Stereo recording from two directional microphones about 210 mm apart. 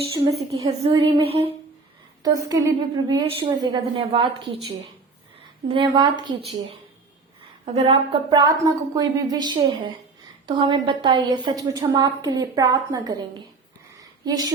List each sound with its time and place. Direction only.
0.6 s a woman's voice: 20° right (ahead or behind)
5.6 s a woman's voice: 25° right (ahead or behind)
14.0 s a sound: 20° right (ahead or behind)